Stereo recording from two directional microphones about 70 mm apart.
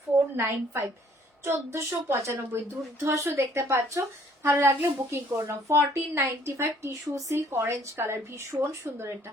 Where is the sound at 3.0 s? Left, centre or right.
Right.